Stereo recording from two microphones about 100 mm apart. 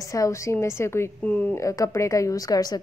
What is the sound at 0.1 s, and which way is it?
A woman's voice, 30° left (ahead or behind).